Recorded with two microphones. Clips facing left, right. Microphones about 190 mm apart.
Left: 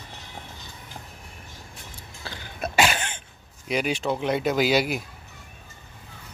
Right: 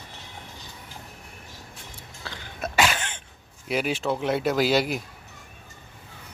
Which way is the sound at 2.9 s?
35° left (ahead or behind).